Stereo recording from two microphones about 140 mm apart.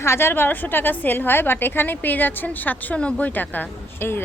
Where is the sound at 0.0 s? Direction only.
20° left (ahead or behind).